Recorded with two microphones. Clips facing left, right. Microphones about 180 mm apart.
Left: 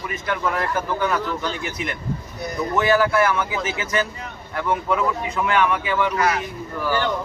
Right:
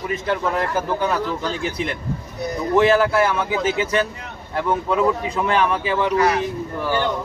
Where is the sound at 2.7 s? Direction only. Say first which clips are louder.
Right 3 dB; 30° right (ahead or behind).